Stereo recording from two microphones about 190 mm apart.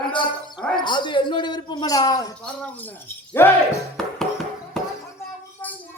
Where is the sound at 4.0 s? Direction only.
5° left (ahead or behind).